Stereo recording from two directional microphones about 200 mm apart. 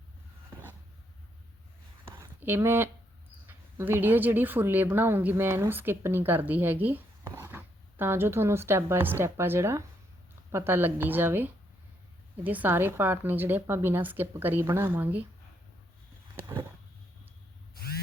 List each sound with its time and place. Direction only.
2.0 s a sound: 10° right (ahead or behind)
3.4 s a woman's voice: 10° right (ahead or behind)
17.7 s spray: 50° left (ahead or behind)